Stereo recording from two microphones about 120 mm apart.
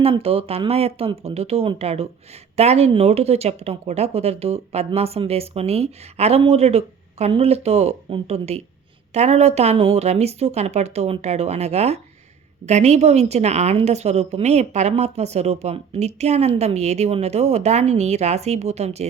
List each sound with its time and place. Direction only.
0.0 s a woman's voice: 55° right (ahead or behind)